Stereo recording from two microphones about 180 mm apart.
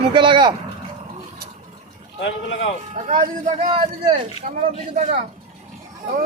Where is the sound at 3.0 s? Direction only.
45° right (ahead or behind).